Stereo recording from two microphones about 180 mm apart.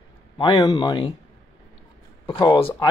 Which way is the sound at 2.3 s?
25° left (ahead or behind).